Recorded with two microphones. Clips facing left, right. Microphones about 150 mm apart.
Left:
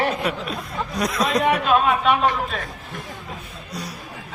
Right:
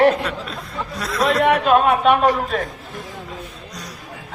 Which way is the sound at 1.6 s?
55° right (ahead or behind).